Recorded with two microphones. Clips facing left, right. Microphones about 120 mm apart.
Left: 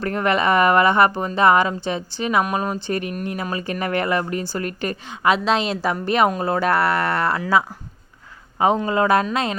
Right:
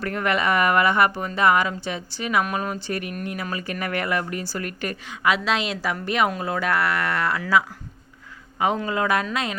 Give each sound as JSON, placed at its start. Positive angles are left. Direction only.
{"t": 0.0, "sound": "speech", "side_deg": 30}
{"t": 8.5, "sound": "a man's voice", "side_deg": 35}